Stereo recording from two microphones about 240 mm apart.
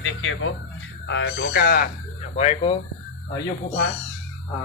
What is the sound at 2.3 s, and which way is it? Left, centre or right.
Speech, left.